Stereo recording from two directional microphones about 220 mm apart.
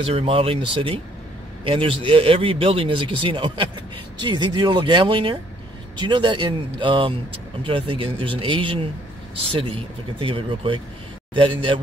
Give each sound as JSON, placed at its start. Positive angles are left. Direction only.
{"t": 0.0, "sound": "a man's voice", "side_deg": -25}